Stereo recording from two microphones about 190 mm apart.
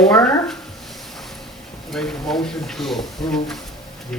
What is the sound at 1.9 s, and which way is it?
A woman's voice, centre (ahead or behind).